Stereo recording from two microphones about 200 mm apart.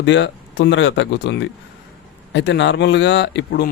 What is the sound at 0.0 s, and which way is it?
Speech, 65° left (ahead or behind).